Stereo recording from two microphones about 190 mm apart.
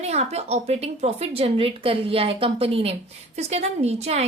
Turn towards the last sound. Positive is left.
turn(degrees=-35)  # may be behind; listen again after turning